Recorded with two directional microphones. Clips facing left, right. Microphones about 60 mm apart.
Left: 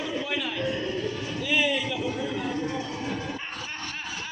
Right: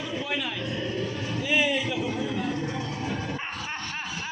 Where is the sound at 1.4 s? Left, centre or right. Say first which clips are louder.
Right 1 dB; centre.